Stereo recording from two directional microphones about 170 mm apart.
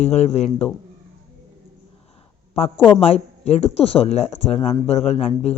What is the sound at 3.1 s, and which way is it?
Speech, 40° left (ahead or behind).